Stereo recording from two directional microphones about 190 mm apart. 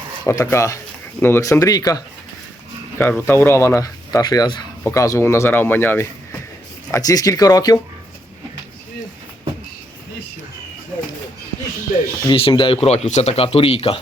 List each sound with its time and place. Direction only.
0.3 s speech: 15° left (ahead or behind)
3.0 s speech: 10° left (ahead or behind)
12.3 s speech: 25° left (ahead or behind)